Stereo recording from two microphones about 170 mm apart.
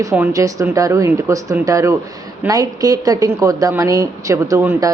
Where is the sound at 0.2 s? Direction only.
15° right (ahead or behind).